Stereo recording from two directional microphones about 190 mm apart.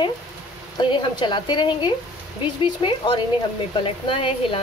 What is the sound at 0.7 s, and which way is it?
Speech, 25° left (ahead or behind).